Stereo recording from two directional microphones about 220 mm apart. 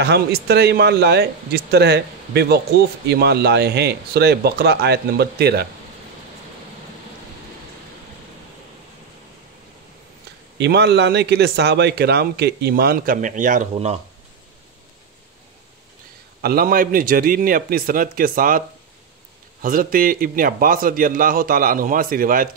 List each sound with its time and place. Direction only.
0.0 s a man's voice: 50° right (ahead or behind)
10.6 s a man's voice: 50° right (ahead or behind); by 13.9 s 35° right (ahead or behind)
16.3 s a man's voice: 45° right (ahead or behind)
19.6 s a man's voice: 40° right (ahead or behind)